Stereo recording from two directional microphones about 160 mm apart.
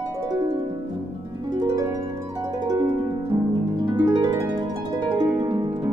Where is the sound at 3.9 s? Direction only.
25° right (ahead or behind).